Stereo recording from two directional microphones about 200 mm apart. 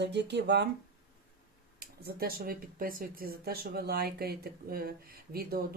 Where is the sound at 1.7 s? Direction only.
50° right (ahead or behind).